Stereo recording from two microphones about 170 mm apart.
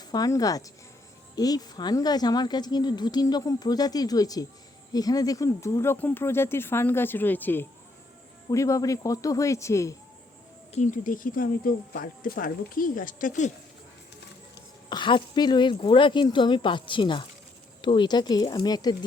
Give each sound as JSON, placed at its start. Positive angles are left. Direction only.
{"t": 0.0, "sound": "a woman's voice", "side_deg": 25}
{"t": 10.7, "sound": "speech", "side_deg": 45}
{"t": 14.8, "sound": "a woman's voice", "side_deg": 25}